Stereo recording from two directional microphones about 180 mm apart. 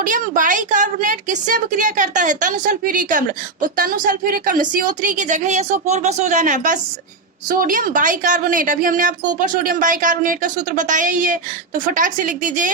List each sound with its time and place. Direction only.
0.0 s a woman's voice: 45° right (ahead or behind)